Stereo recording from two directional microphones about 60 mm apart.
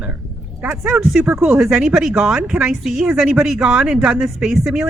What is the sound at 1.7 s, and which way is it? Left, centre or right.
A woman's voice, centre.